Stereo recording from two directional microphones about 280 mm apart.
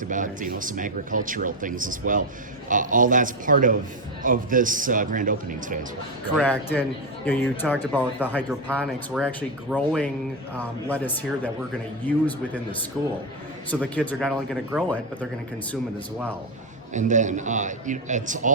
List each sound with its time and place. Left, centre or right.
0.0 s speech: right
6.3 s a man's voice: centre
13.0 s a man's voice: centre
13.7 s speech: centre
16.9 s speech: right